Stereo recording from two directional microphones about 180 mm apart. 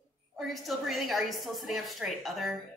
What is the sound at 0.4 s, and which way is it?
A woman's voice, centre (ahead or behind).